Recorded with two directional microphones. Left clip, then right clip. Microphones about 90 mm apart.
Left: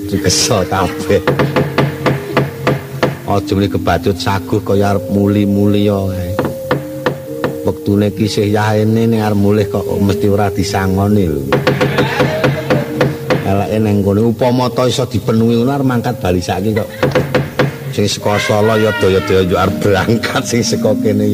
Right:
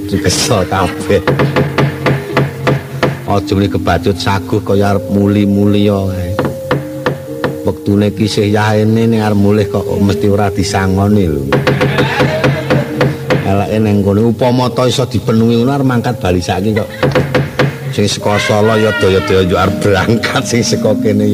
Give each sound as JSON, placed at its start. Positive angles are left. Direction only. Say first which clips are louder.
{"t": 0.1, "sound": "speech", "louder": "even", "side_deg": 40}